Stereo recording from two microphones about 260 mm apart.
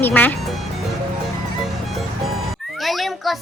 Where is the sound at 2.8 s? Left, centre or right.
Centre.